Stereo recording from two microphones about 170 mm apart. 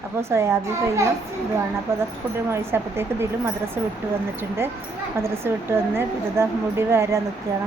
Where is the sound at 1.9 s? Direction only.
15° right (ahead or behind).